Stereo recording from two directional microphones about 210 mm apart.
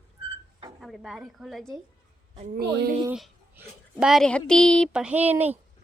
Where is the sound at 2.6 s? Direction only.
50° right (ahead or behind).